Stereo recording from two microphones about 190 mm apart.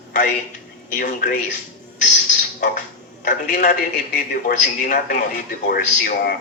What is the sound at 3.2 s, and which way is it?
Speech, 45° left (ahead or behind).